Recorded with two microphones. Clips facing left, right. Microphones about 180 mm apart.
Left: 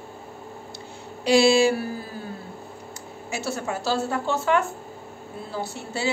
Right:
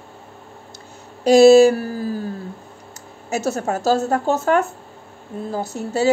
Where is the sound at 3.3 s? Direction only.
40° right (ahead or behind).